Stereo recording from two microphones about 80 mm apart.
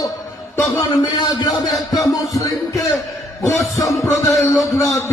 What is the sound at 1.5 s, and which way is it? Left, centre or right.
Music, left.